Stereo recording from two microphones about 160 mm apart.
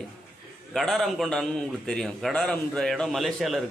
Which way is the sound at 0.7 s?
Centre (ahead or behind).